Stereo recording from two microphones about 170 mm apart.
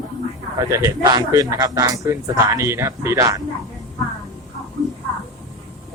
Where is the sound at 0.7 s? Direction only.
20° right (ahead or behind).